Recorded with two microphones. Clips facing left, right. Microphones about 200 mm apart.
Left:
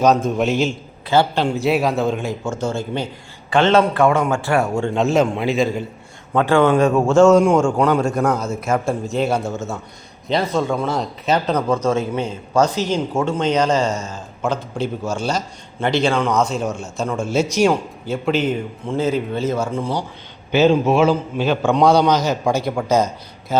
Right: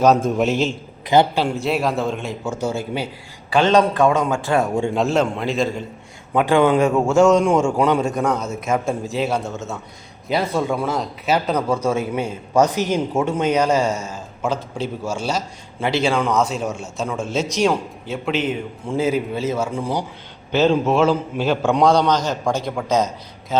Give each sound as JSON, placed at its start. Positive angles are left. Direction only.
{"t": 0.0, "sound": "a man's voice", "side_deg": -5}
{"t": 1.0, "sound": "speech", "side_deg": -20}
{"t": 1.6, "sound": "a man's voice", "side_deg": 0}
{"t": 4.9, "sound": "a man's voice", "side_deg": 5}
{"t": 6.3, "sound": "speech", "side_deg": -15}
{"t": 7.0, "sound": "a man's voice", "side_deg": 5}
{"t": 20.5, "sound": "a man's voice", "side_deg": 5}